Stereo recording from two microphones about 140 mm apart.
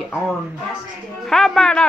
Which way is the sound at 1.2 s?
5° left (ahead or behind).